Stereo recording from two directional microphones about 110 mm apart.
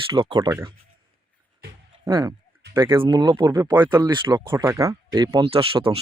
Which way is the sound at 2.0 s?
45° right (ahead or behind).